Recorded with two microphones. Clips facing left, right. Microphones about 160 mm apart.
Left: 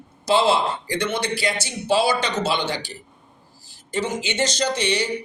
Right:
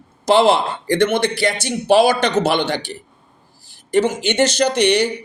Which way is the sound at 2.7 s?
20° right (ahead or behind).